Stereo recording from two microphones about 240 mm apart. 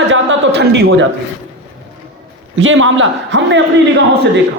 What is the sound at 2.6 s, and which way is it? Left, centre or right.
A man's voice, right.